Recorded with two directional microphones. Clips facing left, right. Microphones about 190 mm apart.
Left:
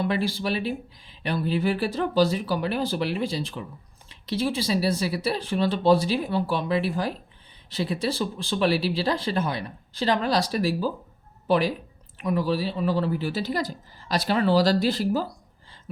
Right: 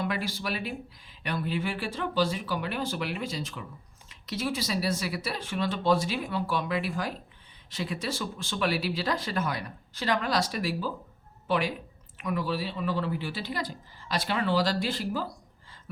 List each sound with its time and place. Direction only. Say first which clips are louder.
0.0 s speech: left 6 dB; 30° left (ahead or behind)